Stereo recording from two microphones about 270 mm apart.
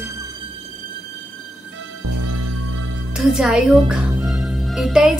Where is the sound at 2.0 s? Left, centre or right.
Right.